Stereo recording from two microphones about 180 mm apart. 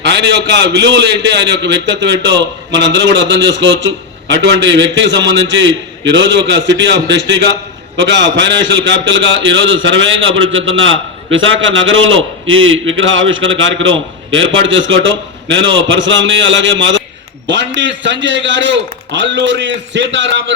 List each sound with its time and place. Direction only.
0.0 s a man's voice: 70° right (ahead or behind); by 20.4 s 85° right